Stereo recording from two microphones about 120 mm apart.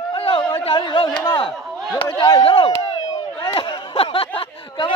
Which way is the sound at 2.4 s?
45° left (ahead or behind).